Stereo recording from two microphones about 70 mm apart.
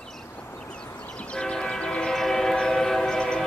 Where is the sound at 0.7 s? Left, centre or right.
Centre.